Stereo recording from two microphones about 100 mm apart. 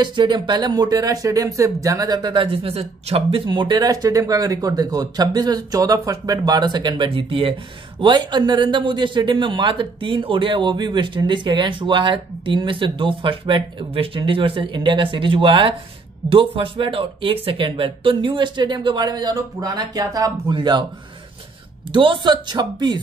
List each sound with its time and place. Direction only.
0.0 s speech: 50° right (ahead or behind)
8.0 s a man's voice: 45° right (ahead or behind)
20.5 s speech: 50° right (ahead or behind)
21.9 s speech: 55° right (ahead or behind)